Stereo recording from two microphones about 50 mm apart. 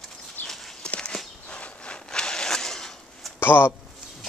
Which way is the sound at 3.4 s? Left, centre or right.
Left.